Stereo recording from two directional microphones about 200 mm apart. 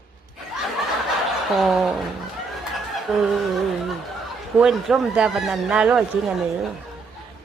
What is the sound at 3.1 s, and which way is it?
Speech, centre (ahead or behind).